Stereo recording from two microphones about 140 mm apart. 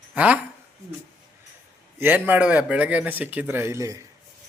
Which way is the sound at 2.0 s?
15° right (ahead or behind).